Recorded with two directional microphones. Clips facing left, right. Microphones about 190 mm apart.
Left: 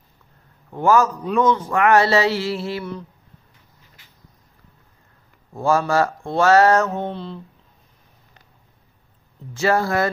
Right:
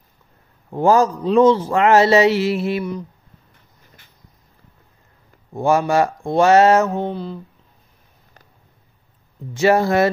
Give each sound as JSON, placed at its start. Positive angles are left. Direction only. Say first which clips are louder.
{"t": 0.7, "sound": "a man's voice", "louder": "right 2 dB", "side_deg": -30}
{"t": 5.5, "sound": "a man's voice", "louder": "right 2 dB", "side_deg": -20}
{"t": 7.1, "sound": "speech", "louder": "right 3 dB", "side_deg": -5}
{"t": 9.5, "sound": "a man's voice", "louder": "right 4 dB", "side_deg": -20}